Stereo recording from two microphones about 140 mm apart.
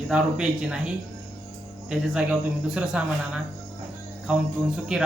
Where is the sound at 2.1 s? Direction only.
5° right (ahead or behind).